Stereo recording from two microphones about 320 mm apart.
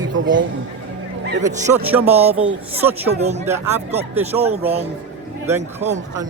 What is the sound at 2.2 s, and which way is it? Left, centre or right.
Speech, centre.